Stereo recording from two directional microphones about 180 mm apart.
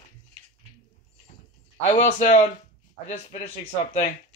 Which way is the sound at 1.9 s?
35° left (ahead or behind).